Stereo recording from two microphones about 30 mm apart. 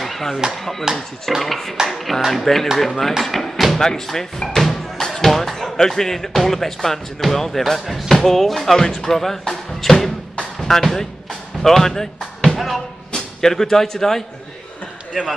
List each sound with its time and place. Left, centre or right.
0.0 s a sound: centre
0.5 s speech: centre
4.6 s music: centre
5.0 s a sound: centre
5.6 s speech: centre
12.4 s speech: centre
13.4 s speech: centre
15.2 s speech: centre